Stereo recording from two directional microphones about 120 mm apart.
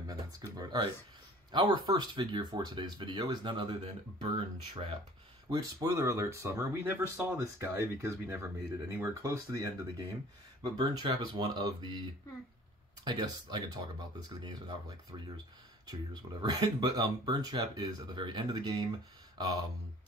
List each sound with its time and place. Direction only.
0.0 s speech: 35° right (ahead or behind)
10.6 s speech: 40° right (ahead or behind)
13.0 s speech: 35° right (ahead or behind)